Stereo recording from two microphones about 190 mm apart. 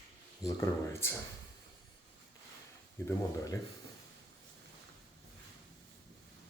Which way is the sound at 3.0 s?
15° left (ahead or behind).